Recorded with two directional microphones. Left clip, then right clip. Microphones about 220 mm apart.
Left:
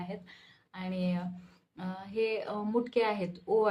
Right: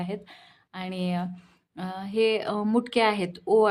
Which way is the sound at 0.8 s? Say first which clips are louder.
Right 5 dB; 50° right (ahead or behind).